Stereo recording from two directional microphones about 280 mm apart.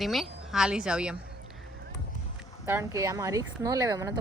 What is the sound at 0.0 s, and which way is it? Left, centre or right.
A woman's voice, centre.